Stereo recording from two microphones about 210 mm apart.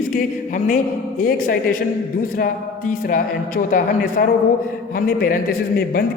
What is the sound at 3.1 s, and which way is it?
A man's voice, 40° left (ahead or behind).